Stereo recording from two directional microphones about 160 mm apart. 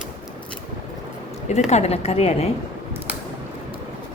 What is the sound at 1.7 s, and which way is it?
Speech, 40° left (ahead or behind).